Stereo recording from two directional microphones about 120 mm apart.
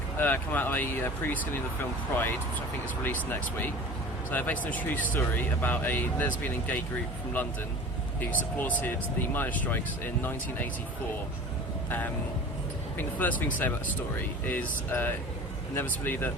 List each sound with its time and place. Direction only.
0.2 s speech: 15° left (ahead or behind)
8.2 s speech: 15° left (ahead or behind)
13.0 s speech: 15° left (ahead or behind)